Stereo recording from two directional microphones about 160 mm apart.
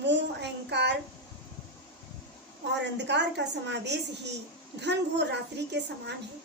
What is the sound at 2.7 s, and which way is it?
A woman's voice, 90° right.